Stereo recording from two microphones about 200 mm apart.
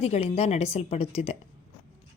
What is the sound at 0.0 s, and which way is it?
A woman's voice, 30° left (ahead or behind).